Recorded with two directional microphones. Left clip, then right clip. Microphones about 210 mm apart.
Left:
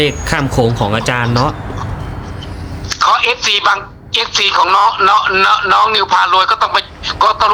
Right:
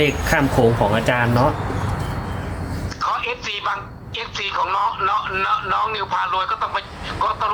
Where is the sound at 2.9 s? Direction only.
40° left (ahead or behind).